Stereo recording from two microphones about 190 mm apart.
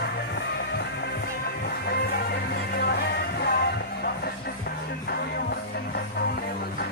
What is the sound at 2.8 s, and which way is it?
Music, 55° left (ahead or behind).